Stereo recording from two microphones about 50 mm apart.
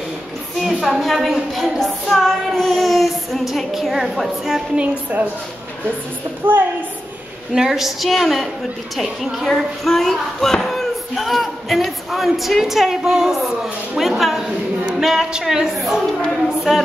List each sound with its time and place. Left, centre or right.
0.6 s speech: centre
4.7 s a woman's voice: right
6.4 s a woman's voice: right
7.5 s a woman's voice: centre